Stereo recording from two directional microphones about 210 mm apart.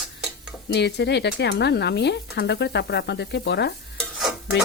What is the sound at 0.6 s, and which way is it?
Speech, 55° left (ahead or behind).